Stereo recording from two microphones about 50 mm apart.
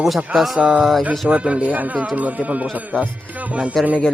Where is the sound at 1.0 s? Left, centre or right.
Right.